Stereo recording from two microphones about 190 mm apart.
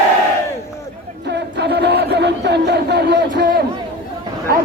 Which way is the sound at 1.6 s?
60° right (ahead or behind).